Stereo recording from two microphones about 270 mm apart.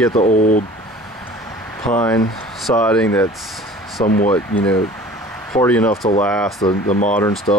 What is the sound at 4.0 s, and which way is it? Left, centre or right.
Speech, left.